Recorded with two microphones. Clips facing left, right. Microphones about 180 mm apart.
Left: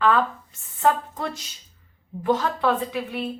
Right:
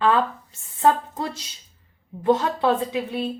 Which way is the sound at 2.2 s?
25° right (ahead or behind).